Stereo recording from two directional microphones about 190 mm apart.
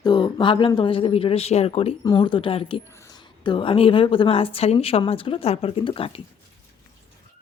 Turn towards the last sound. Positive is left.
turn(degrees=25)  # may be behind; listen again after turning